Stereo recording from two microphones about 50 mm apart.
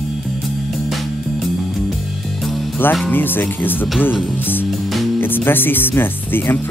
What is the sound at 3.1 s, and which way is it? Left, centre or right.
Speech, left.